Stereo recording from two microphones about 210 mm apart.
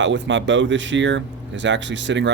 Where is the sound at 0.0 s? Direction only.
60° right (ahead or behind).